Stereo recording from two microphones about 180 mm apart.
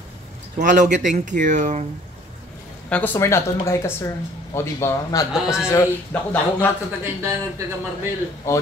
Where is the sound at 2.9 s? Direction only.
10° left (ahead or behind).